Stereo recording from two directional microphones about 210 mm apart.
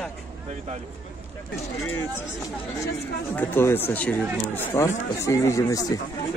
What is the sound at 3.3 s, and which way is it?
Speech, 10° left (ahead or behind).